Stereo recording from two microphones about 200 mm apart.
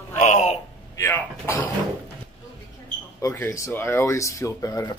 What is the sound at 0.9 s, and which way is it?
Speech, 15° left (ahead or behind).